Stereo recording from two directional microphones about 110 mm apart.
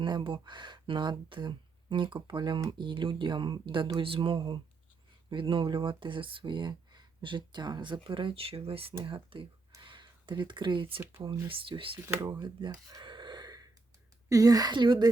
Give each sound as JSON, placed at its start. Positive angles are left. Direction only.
{"t": 0.0, "sound": "speech", "side_deg": -45}
{"t": 11.9, "sound": "speech", "side_deg": -20}
{"t": 12.2, "sound": "speech", "side_deg": -45}
{"t": 12.9, "sound": "gasp", "side_deg": -40}
{"t": 14.3, "sound": "a woman's voice", "side_deg": -35}